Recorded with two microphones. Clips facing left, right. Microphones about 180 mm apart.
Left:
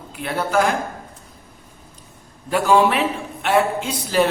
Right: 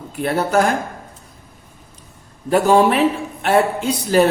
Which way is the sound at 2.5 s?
40° right (ahead or behind).